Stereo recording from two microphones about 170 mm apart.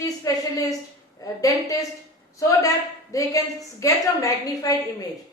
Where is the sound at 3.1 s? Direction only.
20° left (ahead or behind).